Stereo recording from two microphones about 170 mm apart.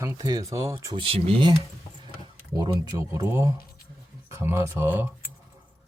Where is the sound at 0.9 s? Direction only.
30° right (ahead or behind); by 5.1 s 10° right (ahead or behind).